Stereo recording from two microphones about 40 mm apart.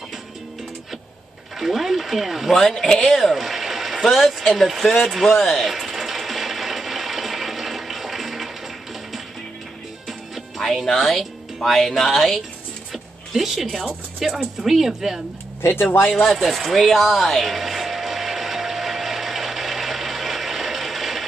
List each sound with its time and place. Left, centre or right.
1.6 s speech: centre
2.5 s a man's voice: centre
5.0 s a sound: centre
10.9 s a woman's voice: centre
15.6 s speech: left
16.1 s a sound: centre